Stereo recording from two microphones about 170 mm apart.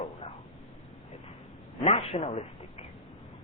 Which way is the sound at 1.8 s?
35° left (ahead or behind).